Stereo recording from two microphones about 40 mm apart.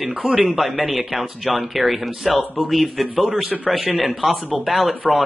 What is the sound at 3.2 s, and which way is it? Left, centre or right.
Speech, right.